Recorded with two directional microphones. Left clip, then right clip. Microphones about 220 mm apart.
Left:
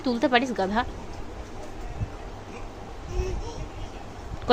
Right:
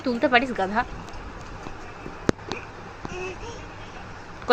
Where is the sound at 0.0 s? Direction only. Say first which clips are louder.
Right 2 dB; 10° left (ahead or behind).